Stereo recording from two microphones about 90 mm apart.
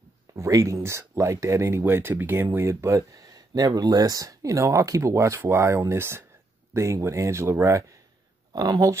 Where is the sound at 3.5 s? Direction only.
45° right (ahead or behind).